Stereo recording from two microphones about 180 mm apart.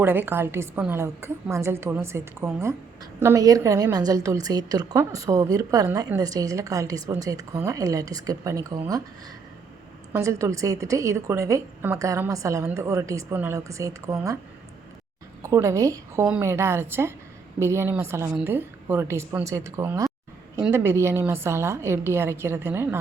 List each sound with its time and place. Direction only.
0.0 s a woman's voice: 10° right (ahead or behind)
10.1 s a woman's voice: 15° right (ahead or behind)
15.4 s a woman's voice: 15° right (ahead or behind)